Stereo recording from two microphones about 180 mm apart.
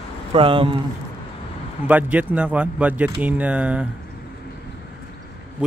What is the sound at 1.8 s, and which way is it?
Speech, 10° right (ahead or behind).